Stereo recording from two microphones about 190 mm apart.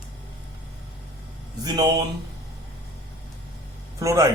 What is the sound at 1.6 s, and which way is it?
Speech, 20° right (ahead or behind).